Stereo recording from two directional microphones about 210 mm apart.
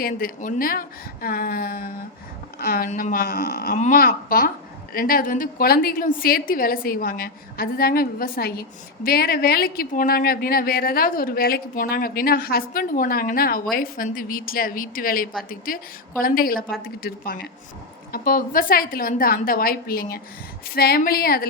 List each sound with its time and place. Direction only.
0.0 s a woman's voice: 45° left (ahead or behind)